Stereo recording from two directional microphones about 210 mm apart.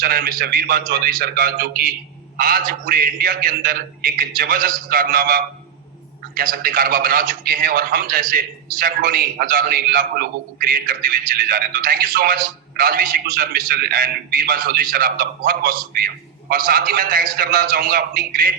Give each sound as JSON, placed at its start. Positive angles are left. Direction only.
{"t": 0.0, "sound": "a man's voice", "side_deg": -45}